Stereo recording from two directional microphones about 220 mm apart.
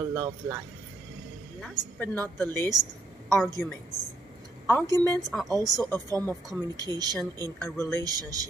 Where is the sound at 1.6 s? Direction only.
10° left (ahead or behind).